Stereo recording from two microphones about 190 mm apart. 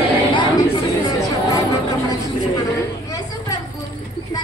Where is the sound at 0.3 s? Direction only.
25° left (ahead or behind).